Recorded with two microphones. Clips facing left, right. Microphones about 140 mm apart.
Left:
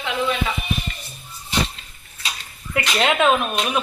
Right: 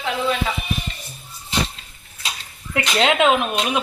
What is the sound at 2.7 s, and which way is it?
Speech, 20° right (ahead or behind).